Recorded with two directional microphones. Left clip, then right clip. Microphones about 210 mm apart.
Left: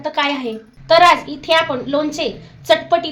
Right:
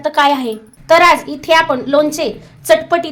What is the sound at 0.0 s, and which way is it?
A woman's voice, 35° right (ahead or behind).